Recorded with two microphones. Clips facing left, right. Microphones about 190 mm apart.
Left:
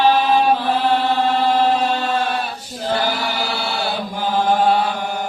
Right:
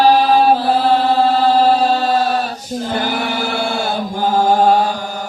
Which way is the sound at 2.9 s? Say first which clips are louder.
Even; 55° right (ahead or behind).